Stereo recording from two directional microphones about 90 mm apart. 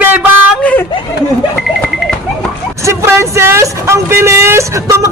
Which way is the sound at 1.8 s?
5° left (ahead or behind).